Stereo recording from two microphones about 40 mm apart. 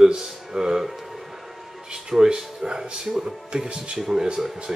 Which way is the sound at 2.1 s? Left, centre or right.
Centre.